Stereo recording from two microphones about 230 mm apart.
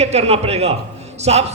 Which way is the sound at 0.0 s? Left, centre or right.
Right.